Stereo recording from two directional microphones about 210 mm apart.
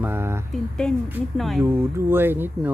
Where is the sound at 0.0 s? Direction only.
10° right (ahead or behind).